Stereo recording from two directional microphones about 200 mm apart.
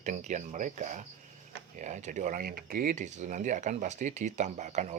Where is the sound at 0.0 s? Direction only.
35° right (ahead or behind).